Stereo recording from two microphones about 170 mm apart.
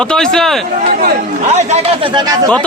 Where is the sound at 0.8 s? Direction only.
60° right (ahead or behind).